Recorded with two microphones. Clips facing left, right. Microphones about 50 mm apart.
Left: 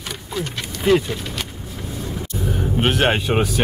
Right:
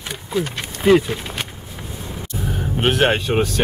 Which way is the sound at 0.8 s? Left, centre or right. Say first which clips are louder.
Right 3 dB; centre.